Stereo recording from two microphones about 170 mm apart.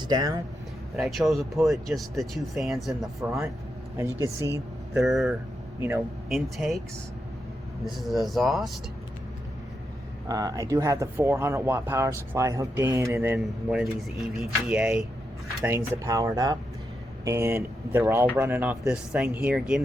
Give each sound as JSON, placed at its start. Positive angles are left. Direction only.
{"t": 0.1, "sound": "speech", "side_deg": -20}
{"t": 0.9, "sound": "speech", "side_deg": 0}
{"t": 5.0, "sound": "speech", "side_deg": 0}
{"t": 7.9, "sound": "speech", "side_deg": 0}
{"t": 10.2, "sound": "speech", "side_deg": -20}
{"t": 13.4, "sound": "speech", "side_deg": -5}
{"t": 15.6, "sound": "speech", "side_deg": -15}